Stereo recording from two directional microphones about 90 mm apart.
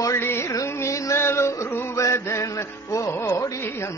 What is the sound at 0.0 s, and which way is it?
Music, 30° left (ahead or behind).